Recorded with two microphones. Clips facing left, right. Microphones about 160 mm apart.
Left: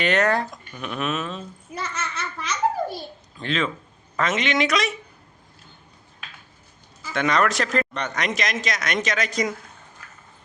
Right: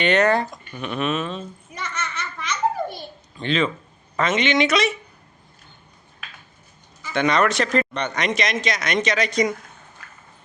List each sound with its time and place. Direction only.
0.0 s speech: centre (ahead or behind)
1.8 s a sound: 30° left (ahead or behind)
3.3 s speech: centre (ahead or behind)
7.0 s speech: centre (ahead or behind)